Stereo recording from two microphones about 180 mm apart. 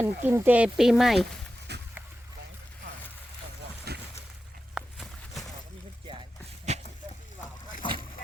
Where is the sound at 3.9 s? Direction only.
65° right (ahead or behind).